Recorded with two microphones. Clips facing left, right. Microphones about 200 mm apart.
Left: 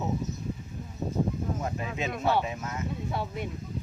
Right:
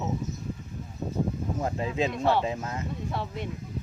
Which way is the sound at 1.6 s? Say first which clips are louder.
Right 5 dB; 30° right (ahead or behind).